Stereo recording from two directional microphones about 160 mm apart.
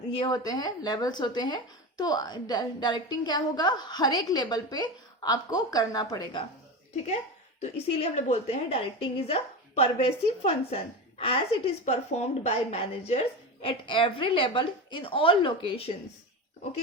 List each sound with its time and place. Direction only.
0.2 s speech: 25° left (ahead or behind)
7.6 s speech: 40° left (ahead or behind)